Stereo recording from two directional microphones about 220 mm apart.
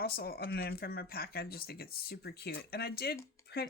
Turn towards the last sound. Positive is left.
turn(degrees=45)  # may be behind; listen again after turning